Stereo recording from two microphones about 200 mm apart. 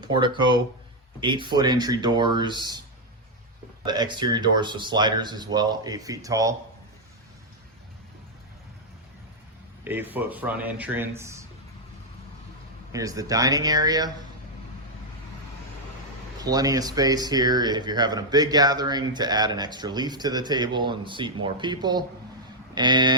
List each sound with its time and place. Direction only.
0.0 s speech: 20° right (ahead or behind)
3.8 s speech: 20° right (ahead or behind)
9.8 s speech: 10° right (ahead or behind)
12.9 s speech: 15° right (ahead or behind)
16.4 s speech: 20° right (ahead or behind)